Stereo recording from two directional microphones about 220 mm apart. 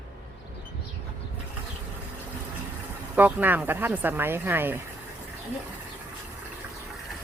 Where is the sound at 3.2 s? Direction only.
5° right (ahead or behind).